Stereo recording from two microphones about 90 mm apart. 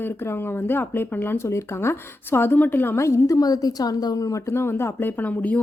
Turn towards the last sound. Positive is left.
turn(degrees=15)  # may be behind; listen again after turning